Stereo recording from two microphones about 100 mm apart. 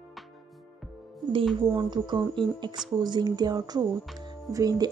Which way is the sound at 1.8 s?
50° right (ahead or behind).